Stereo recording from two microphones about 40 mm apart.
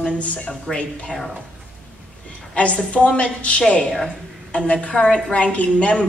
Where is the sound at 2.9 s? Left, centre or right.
Left.